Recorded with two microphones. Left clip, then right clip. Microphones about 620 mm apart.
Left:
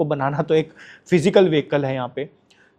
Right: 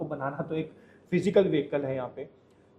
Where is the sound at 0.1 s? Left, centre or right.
Left.